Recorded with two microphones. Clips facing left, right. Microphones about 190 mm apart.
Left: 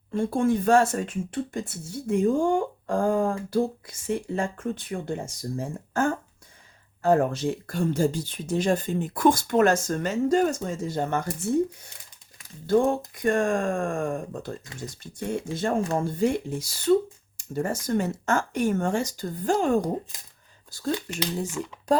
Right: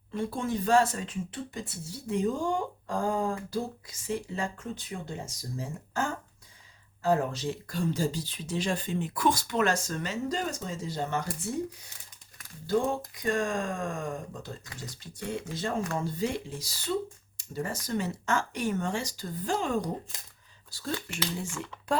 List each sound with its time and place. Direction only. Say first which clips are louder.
0.2 s speech: left 8 dB; 50° left (ahead or behind)
13.2 s speech: left 6 dB; 55° left (ahead or behind)
20.9 s speech: left 4 dB; 20° left (ahead or behind)